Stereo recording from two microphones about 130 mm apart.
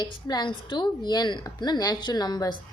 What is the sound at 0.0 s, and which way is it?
A woman's voice, 30° left (ahead or behind).